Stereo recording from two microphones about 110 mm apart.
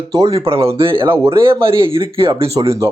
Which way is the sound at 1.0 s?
20° right (ahead or behind).